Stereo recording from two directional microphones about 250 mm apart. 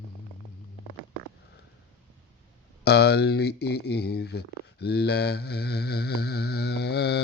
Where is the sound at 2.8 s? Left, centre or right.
Left.